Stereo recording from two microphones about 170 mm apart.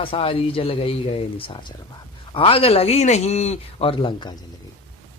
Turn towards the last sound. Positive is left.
turn(degrees=25)  # may be behind; listen again after turning